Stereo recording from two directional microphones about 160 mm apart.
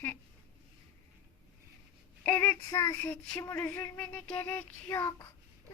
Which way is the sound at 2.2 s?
10° left (ahead or behind).